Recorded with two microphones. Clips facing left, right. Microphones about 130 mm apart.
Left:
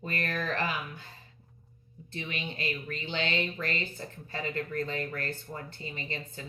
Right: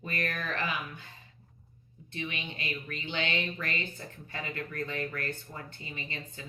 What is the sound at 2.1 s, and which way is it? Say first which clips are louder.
Speech: left 1 dB; 35° left (ahead or behind).